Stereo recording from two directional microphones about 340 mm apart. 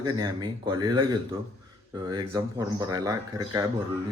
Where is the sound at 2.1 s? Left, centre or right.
Centre.